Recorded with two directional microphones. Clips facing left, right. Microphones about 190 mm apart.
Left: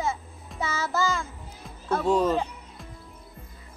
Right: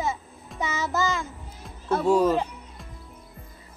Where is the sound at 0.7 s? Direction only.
20° right (ahead or behind).